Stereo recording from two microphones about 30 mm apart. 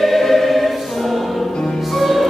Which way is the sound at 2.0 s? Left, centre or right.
Centre.